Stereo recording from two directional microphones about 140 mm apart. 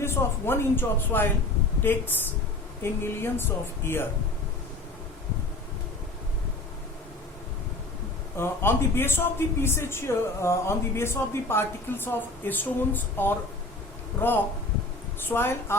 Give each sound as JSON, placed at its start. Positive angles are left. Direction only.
{"t": 0.0, "sound": "speech", "side_deg": 15}
{"t": 8.4, "sound": "speech", "side_deg": 15}